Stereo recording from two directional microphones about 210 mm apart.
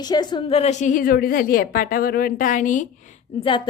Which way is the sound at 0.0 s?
20° left (ahead or behind).